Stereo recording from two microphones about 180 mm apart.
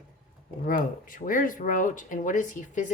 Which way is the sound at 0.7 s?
50° left (ahead or behind).